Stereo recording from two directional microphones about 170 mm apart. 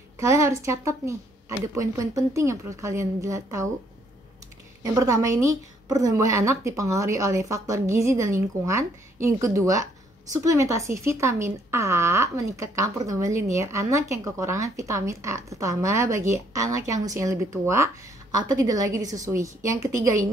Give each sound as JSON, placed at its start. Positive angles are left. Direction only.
{"t": 0.2, "sound": "a woman's voice", "side_deg": -15}
{"t": 4.8, "sound": "a woman's voice", "side_deg": -20}